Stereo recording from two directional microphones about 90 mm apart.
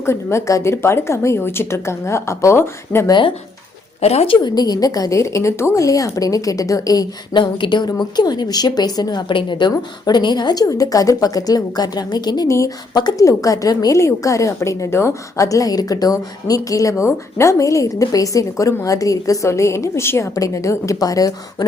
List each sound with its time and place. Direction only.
0.0 s a woman's voice: 30° left (ahead or behind)
3.1 s a woman's voice: 65° left (ahead or behind); by 7.1 s 40° left (ahead or behind)
7.3 s speech: 60° left (ahead or behind)
7.9 s a woman's voice: 45° left (ahead or behind)
9.3 s a woman's voice: 60° left (ahead or behind)
12.5 s a woman's voice: 35° left (ahead or behind)
12.9 s a woman's voice: 50° left (ahead or behind)
13.2 s a woman's voice: 40° left (ahead or behind)